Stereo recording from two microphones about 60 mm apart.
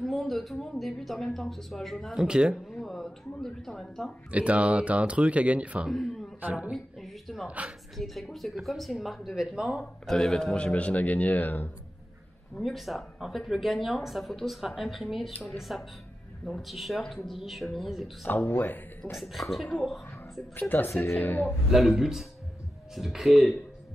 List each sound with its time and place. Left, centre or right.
0.0 s speech: centre
2.1 s speech: centre
2.5 s speech: centre
4.3 s speech: right
6.7 s speech: centre
7.4 s speech: right
8.0 s speech: centre
10.0 s a man's voice: centre; by 11.7 s left
12.5 s speech: centre
18.2 s speech: left
19.1 s speech: centre
20.5 s speech: left
21.6 s speech: centre